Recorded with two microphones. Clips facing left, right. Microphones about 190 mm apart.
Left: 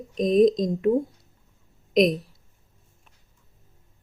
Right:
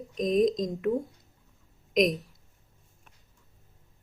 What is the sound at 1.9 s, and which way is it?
Speech, 30° left (ahead or behind).